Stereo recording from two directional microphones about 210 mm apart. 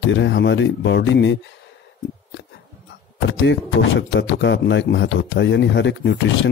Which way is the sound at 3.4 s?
60° left (ahead or behind).